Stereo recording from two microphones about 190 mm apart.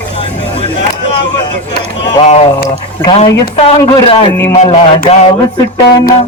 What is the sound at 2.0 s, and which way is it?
Speech, 30° left (ahead or behind).